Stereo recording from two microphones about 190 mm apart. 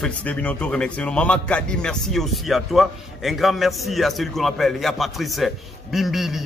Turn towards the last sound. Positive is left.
turn(degrees=0)  # may be behind; listen again after turning